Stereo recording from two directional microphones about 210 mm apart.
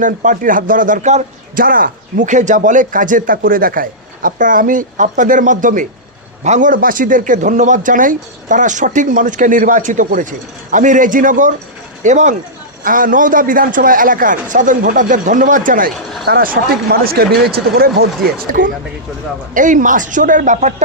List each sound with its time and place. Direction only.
0.0 s a man's voice: 40° right (ahead or behind)
19.5 s a man's voice: 40° right (ahead or behind)